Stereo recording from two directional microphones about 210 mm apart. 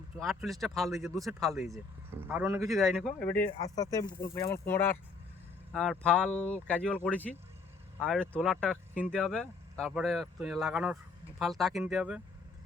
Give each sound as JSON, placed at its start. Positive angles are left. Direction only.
{"t": 0.2, "sound": "a man's voice", "side_deg": 0}
{"t": 2.6, "sound": "speech", "side_deg": 0}
{"t": 3.1, "sound": "speech", "side_deg": 45}
{"t": 3.8, "sound": "speech", "side_deg": 15}